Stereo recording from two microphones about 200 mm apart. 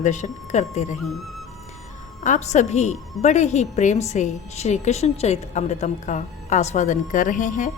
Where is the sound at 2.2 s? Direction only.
35° left (ahead or behind).